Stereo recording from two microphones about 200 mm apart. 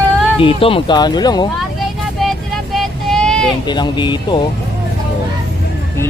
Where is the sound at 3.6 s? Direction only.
20° left (ahead or behind).